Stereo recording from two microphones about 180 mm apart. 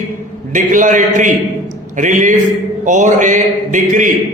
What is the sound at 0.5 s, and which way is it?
Speech, 45° right (ahead or behind).